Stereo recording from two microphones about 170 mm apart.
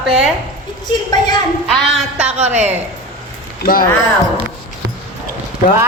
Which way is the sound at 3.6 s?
55° left (ahead or behind).